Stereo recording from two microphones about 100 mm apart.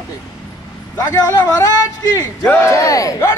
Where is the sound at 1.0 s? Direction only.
35° left (ahead or behind).